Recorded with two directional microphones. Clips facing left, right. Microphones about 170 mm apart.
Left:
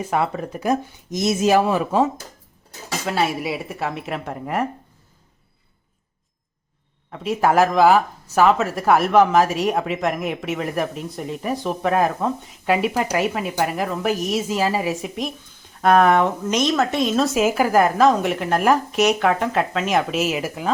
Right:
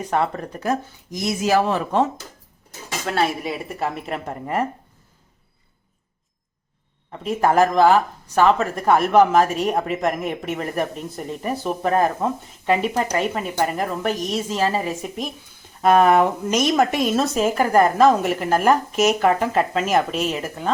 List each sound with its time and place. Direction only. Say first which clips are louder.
0.1 s speech: right 1 dB; 5° left (ahead or behind); by 1.6 s 20° left (ahead or behind)
1.6 s speech: left 1 dB; 10° left (ahead or behind)
3.1 s speech: even; 5° left (ahead or behind)
7.1 s speech: even; centre (ahead or behind)